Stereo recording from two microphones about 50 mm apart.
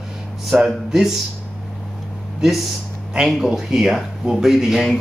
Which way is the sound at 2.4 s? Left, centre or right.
Centre.